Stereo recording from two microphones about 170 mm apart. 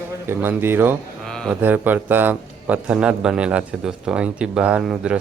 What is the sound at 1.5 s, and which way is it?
A man's voice, 10° right (ahead or behind).